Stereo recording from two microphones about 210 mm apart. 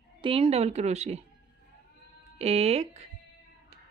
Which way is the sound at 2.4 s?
30° right (ahead or behind).